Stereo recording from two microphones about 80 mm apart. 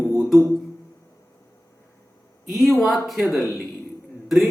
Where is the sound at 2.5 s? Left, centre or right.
Centre.